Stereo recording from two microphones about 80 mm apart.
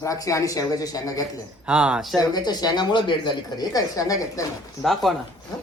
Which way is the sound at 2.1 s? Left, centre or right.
Left.